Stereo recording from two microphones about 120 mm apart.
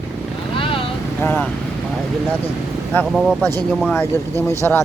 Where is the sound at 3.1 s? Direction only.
Centre (ahead or behind).